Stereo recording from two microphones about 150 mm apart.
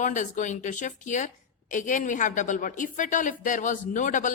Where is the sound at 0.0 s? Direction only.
55° left (ahead or behind).